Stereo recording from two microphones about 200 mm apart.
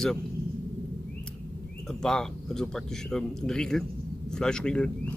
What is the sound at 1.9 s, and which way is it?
Speech, centre (ahead or behind).